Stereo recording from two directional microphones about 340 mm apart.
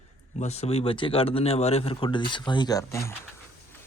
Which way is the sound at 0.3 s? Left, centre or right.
Centre.